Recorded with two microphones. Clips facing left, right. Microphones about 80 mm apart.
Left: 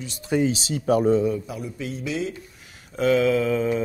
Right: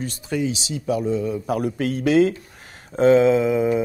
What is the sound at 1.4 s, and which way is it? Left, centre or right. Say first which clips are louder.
Speech: right 9 dB; right.